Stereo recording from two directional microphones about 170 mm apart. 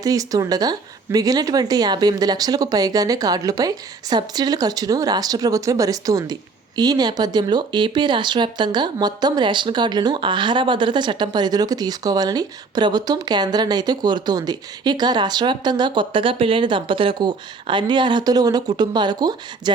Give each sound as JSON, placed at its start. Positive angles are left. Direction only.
{"t": 0.0, "sound": "speech", "side_deg": -20}